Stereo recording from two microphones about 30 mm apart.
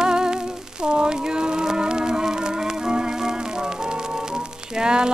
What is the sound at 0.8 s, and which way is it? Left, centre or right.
Music, right.